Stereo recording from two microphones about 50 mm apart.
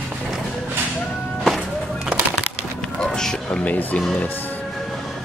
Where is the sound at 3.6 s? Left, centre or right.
Left.